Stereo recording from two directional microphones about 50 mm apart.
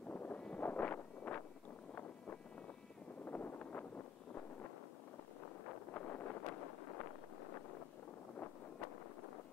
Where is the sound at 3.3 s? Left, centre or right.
Left.